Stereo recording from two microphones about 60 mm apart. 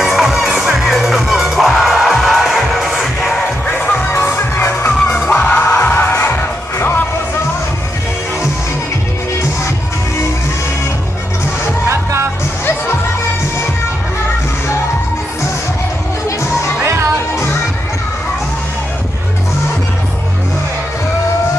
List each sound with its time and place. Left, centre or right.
0.0 s music: centre
3.2 s music: centre
3.6 s music: left
5.2 s music: left
11.9 s music: right
16.8 s music: right